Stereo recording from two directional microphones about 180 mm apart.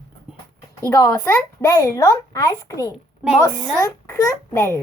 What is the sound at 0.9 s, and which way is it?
Speech, 15° left (ahead or behind).